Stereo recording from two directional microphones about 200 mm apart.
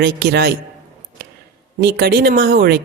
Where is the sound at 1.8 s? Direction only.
50° right (ahead or behind).